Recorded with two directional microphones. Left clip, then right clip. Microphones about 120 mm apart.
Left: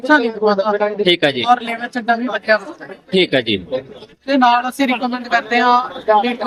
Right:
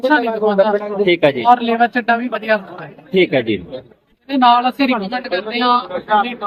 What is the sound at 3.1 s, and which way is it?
Speech, 90° left.